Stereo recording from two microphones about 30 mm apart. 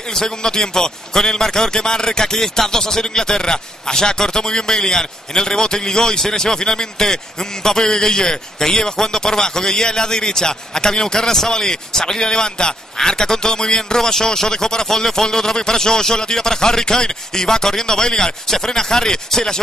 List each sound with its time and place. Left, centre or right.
0.1 s a man's voice: centre